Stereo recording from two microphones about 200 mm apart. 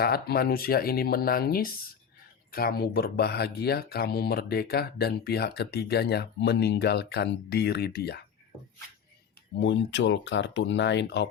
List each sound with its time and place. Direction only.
0.0 s speech: 50° left (ahead or behind)
9.6 s speech: 60° left (ahead or behind)